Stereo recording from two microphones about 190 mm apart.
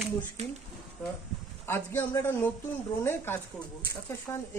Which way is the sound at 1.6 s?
10° left (ahead or behind).